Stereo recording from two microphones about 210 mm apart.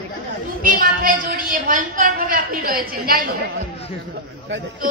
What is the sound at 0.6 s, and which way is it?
A woman's voice, 40° right (ahead or behind).